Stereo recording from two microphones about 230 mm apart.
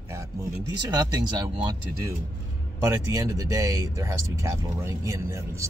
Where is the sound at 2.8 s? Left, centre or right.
Centre.